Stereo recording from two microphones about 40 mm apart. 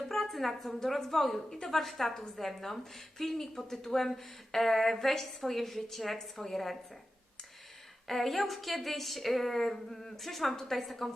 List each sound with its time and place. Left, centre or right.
0.1 s a woman's voice: centre
8.0 s speech: centre